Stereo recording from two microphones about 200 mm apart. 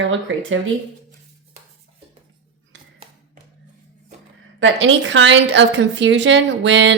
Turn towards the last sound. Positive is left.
turn(degrees=-65)  # may be behind; listen again after turning